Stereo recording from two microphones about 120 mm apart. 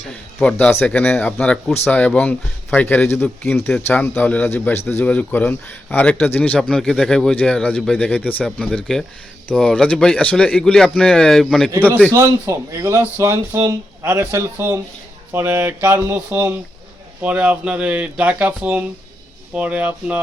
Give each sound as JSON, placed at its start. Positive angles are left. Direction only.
{"t": 0.4, "sound": "speech", "side_deg": 15}
{"t": 8.4, "sound": "speech", "side_deg": 5}
{"t": 12.1, "sound": "speech", "side_deg": -25}